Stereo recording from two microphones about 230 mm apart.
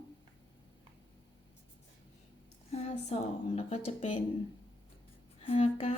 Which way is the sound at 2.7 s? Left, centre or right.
Left.